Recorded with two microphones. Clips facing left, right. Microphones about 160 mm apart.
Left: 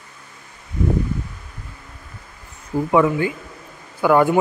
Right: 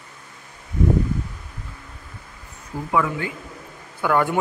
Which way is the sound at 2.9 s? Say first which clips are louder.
Left 6 dB; 25° left (ahead or behind).